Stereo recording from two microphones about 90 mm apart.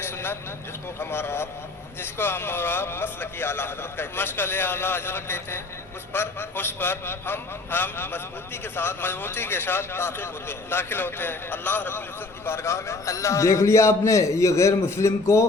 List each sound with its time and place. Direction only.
0.0 s vehicle: 25° left (ahead or behind)
0.9 s a man's voice: 25° left (ahead or behind)